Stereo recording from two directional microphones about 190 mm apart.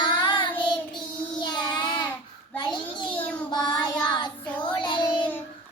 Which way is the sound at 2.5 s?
25° left (ahead or behind).